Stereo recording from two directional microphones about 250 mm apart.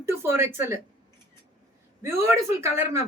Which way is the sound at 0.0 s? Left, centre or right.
Centre.